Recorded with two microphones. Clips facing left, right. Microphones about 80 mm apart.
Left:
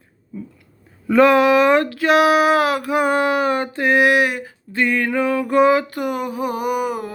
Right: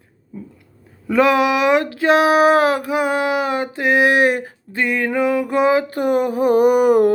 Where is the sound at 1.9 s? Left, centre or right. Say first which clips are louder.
Even; right.